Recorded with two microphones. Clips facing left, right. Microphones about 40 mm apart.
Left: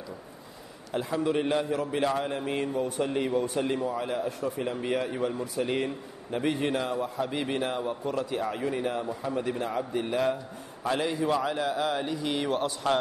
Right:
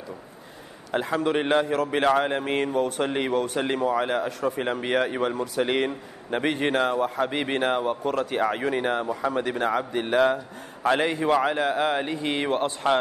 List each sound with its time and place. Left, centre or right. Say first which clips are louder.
0.9 s a man's voice: right 3 dB; right